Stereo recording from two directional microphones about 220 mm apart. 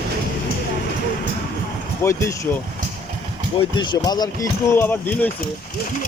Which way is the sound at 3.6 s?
20° left (ahead or behind).